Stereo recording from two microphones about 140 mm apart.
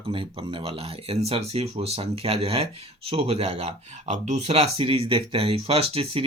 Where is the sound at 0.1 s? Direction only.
40° right (ahead or behind).